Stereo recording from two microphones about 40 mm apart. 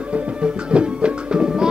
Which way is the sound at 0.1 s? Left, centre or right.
Right.